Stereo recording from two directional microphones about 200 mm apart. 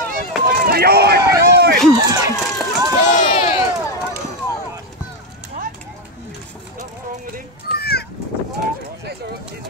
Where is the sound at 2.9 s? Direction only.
40° left (ahead or behind).